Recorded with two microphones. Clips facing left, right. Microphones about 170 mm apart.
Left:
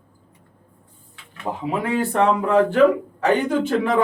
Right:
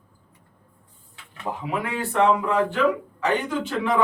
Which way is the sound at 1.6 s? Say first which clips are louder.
Left 7 dB; 30° left (ahead or behind).